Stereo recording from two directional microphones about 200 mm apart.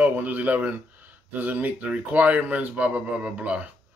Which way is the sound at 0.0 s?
10° right (ahead or behind).